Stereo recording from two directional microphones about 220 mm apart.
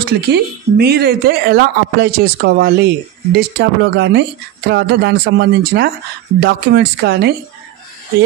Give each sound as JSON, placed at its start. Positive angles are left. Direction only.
{"t": 0.0, "sound": "speech", "side_deg": -45}